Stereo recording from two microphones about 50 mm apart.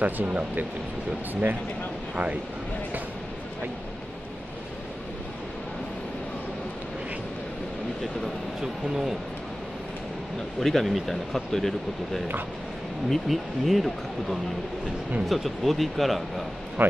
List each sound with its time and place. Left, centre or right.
0.0 s speech: right
8.5 s speech: centre
10.6 s speech: centre